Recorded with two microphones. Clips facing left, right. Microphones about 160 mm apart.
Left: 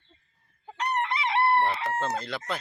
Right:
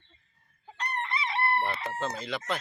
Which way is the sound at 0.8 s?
85° left.